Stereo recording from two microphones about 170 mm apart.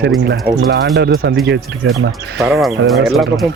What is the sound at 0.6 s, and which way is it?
Speech, 80° right.